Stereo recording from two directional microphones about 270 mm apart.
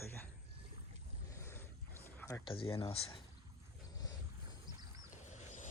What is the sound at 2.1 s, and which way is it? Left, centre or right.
Speech, centre.